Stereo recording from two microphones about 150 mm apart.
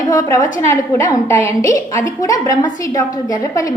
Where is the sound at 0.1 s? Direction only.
20° left (ahead or behind).